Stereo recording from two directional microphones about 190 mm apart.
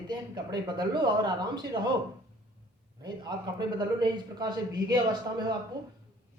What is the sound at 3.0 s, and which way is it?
Speech, 20° right (ahead or behind).